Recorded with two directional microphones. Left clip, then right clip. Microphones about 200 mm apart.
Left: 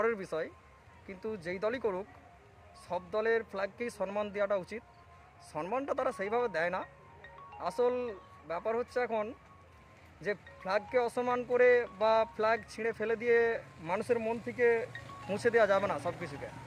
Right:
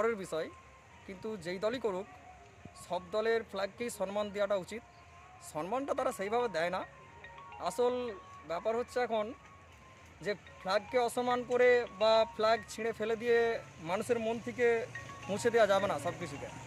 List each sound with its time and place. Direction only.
0.0 s speech: centre (ahead or behind)